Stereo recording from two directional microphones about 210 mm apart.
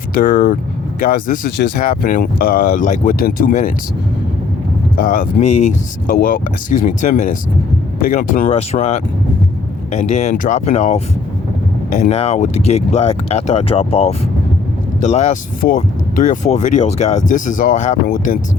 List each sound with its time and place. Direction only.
0.2 s speech: 40° left (ahead or behind)
4.9 s speech: 40° left (ahead or behind)